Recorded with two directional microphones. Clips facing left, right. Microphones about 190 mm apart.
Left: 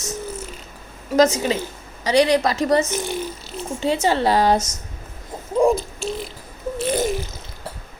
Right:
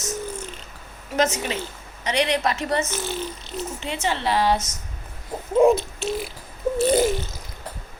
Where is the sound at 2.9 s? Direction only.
15° left (ahead or behind).